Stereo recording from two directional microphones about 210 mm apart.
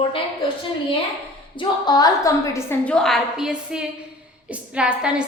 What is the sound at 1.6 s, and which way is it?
A woman's voice, 20° left (ahead or behind).